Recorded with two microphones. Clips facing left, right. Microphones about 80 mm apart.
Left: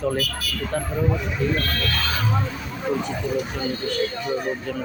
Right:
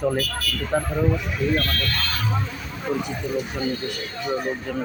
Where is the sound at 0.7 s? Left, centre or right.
Centre.